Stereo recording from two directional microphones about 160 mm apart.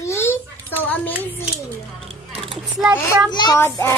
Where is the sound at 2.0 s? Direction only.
40° right (ahead or behind).